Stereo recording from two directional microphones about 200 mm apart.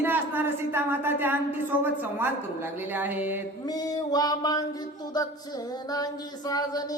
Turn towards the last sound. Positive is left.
turn(degrees=20)  # may be behind; listen again after turning